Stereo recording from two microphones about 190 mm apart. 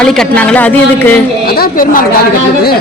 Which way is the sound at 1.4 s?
50° left (ahead or behind).